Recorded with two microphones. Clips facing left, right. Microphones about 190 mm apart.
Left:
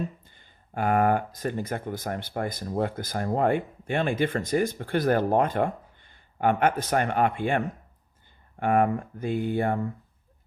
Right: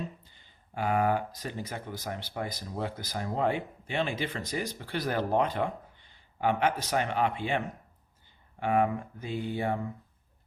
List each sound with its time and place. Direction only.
0.3 s speech: 50° left (ahead or behind)